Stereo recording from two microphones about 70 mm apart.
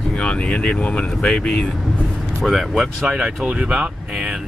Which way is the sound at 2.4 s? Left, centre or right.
Centre.